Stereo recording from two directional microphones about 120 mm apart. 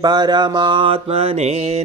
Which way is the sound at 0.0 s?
35° right (ahead or behind).